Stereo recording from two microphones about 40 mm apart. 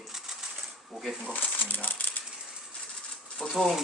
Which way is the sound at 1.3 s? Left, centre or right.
Left.